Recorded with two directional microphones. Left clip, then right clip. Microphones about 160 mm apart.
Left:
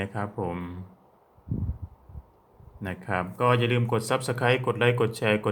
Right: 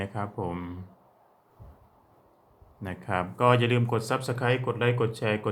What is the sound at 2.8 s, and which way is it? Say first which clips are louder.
Speech: left 1 dB; 10° left (ahead or behind).